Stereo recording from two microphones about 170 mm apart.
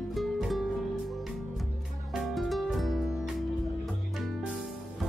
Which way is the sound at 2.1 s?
Centre (ahead or behind).